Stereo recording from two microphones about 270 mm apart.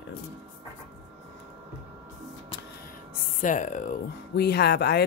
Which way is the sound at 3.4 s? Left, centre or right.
Left.